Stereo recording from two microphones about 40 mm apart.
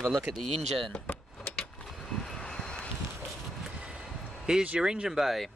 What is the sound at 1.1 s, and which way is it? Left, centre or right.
Vehicle, left.